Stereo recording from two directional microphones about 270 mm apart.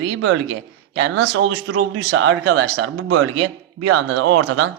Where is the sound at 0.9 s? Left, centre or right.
Right.